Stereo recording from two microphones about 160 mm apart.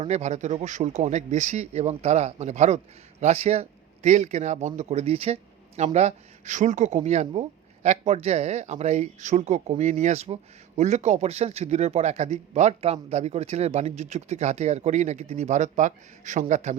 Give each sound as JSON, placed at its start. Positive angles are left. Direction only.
{"t": 0.0, "sound": "speech", "side_deg": -45}